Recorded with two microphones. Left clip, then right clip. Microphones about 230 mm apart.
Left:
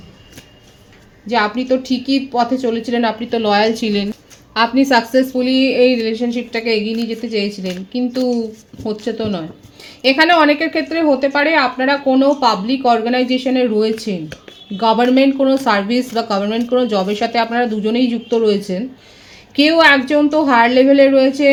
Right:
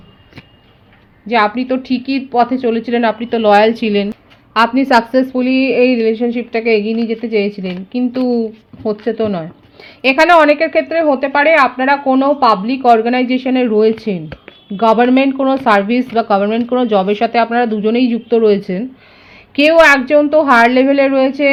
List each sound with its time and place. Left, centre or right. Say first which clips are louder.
1.3 s a woman's voice: right 2 dB; right